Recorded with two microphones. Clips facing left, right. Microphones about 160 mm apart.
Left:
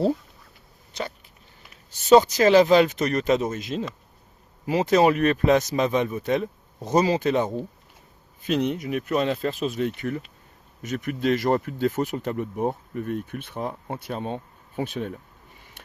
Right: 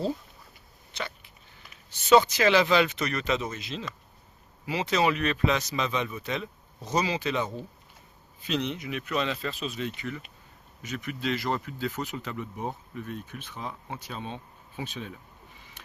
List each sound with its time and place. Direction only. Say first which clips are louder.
0.9 s hiccup: left 5 dB; 40° left (ahead or behind)
1.9 s speech: left 4 dB; 40° left (ahead or behind); by 15.2 s 55° left (ahead or behind)